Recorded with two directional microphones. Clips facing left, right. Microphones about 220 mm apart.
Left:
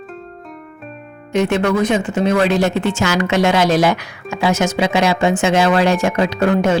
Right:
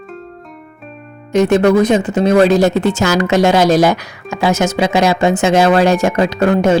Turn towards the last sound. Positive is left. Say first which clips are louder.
# right 3 dB
turn(degrees=-40)  # may be behind; listen again after turning